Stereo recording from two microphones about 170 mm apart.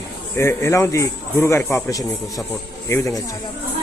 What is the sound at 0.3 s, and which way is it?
A man's voice, 15° left (ahead or behind).